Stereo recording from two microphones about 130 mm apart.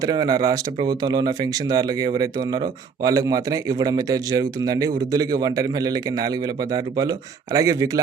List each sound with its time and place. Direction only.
0.0 s speech: 30° right (ahead or behind)